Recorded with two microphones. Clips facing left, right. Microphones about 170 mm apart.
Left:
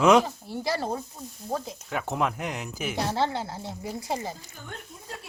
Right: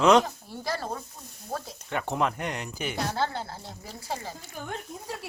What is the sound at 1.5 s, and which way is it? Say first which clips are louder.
Speech: left 4 dB; 20° left (ahead or behind).